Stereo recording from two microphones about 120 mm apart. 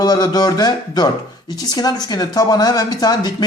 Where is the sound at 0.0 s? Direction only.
35° left (ahead or behind).